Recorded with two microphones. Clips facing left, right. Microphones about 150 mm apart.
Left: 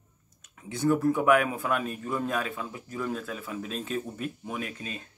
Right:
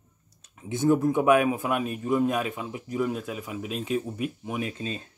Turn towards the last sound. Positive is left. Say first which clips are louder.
# right 5 dB
turn(degrees=-30)  # may be behind; listen again after turning